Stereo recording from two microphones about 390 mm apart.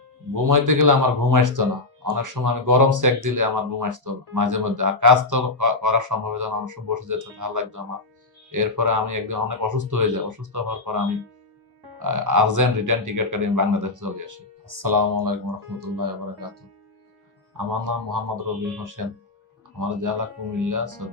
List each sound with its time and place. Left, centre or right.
0.3 s speech: right
11.9 s speech: right
17.7 s speech: right